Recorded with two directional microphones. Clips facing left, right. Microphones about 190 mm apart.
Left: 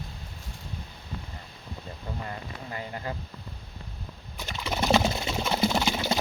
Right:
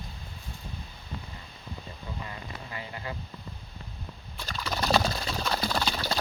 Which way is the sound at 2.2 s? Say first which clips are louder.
Left 3 dB; 40° left (ahead or behind).